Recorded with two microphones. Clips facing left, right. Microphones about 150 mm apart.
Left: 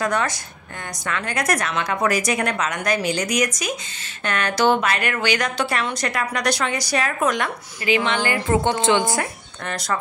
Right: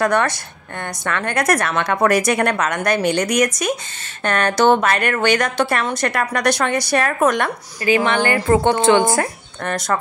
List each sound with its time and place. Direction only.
0.0 s a woman's voice: 60° right (ahead or behind)
4.2 s a woman's voice: 50° right (ahead or behind)